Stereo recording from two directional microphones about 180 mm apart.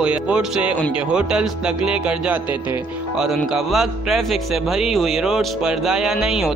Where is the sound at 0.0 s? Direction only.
5° right (ahead or behind).